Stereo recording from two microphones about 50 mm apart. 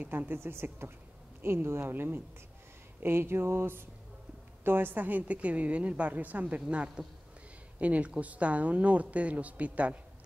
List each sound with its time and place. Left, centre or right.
0.3 s speech: right